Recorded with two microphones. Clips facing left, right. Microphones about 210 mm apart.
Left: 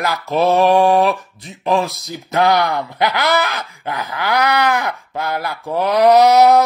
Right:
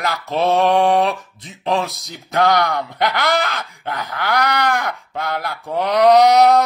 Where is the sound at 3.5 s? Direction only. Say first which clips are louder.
Left 1 dB; 10° left (ahead or behind).